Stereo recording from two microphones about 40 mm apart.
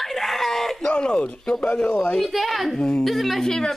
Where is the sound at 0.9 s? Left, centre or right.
Left.